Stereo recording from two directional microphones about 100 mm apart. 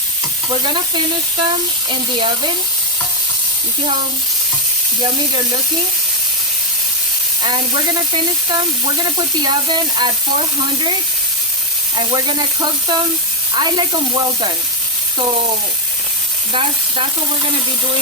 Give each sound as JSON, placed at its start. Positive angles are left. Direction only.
{"t": 0.5, "sound": "speech", "side_deg": -50}
{"t": 5.0, "sound": "speech", "side_deg": -50}
{"t": 7.4, "sound": "speech", "side_deg": -45}
{"t": 11.9, "sound": "speech", "side_deg": -50}
{"t": 16.5, "sound": "speech", "side_deg": -65}